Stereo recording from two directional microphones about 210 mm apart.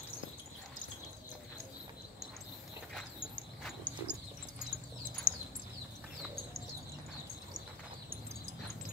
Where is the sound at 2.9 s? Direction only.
5° left (ahead or behind).